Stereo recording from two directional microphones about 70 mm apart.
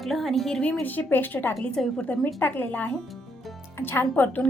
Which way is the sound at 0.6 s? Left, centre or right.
Centre.